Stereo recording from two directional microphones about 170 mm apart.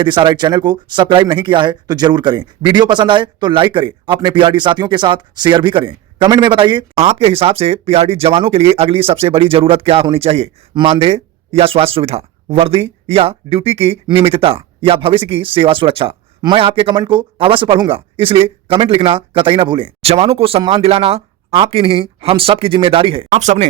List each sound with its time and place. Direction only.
0.0 s speech: 25° right (ahead or behind)
23.3 s speech: 45° right (ahead or behind)